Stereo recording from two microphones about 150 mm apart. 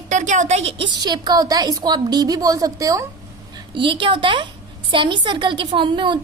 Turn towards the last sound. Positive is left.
turn(degrees=-35)  # may be behind; listen again after turning